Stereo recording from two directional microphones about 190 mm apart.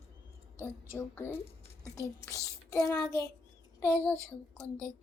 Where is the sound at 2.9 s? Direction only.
20° left (ahead or behind).